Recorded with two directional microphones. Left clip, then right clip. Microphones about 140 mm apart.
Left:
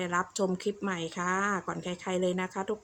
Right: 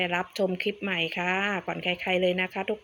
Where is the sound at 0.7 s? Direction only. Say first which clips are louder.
Right 3 dB; 40° right (ahead or behind).